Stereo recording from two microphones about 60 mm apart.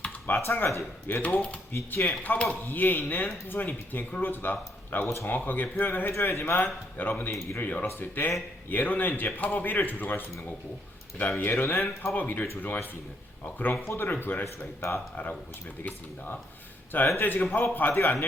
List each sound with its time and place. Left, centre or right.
0.0 s a sound: left
0.4 s a man's voice: left
5.0 s a man's voice: left
7.9 s a man's voice: left
11.3 s speech: left
11.5 s speech: left
12.1 s a man's voice: left
13.8 s speech: left
14.1 s a man's voice: left
14.4 s speech: left
15.1 s a man's voice: left